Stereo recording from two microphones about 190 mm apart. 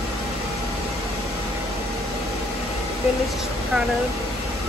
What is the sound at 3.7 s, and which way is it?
Speech, centre (ahead or behind).